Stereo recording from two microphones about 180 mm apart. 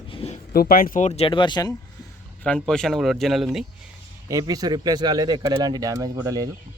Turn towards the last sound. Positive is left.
turn(degrees=-20)  # may be behind; listen again after turning